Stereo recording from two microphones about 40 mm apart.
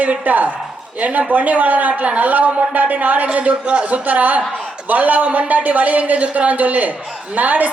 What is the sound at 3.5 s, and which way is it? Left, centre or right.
Speech, right.